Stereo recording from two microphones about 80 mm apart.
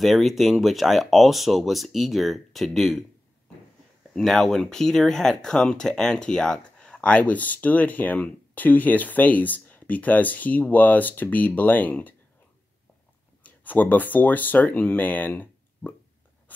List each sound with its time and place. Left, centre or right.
0.0 s speech: centre
4.1 s speech: centre; by 12.1 s left
13.4 s speech: left